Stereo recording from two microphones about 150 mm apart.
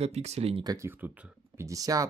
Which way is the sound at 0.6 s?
25° right (ahead or behind).